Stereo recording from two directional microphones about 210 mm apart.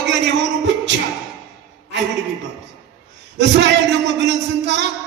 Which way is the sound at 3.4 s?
55° right (ahead or behind).